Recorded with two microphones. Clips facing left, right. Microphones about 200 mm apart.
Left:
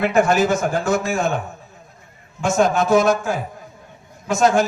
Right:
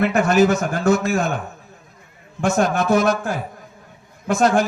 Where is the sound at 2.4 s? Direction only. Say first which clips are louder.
Left 1 dB; 55° right (ahead or behind).